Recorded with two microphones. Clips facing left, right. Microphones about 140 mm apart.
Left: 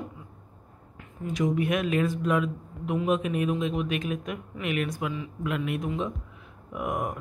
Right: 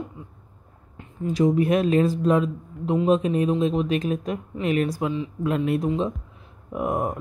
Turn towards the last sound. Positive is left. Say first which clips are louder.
# right 5 dB
turn(degrees=-30)  # may be behind; listen again after turning